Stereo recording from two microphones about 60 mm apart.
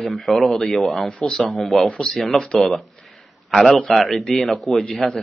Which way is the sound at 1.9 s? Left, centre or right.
Centre.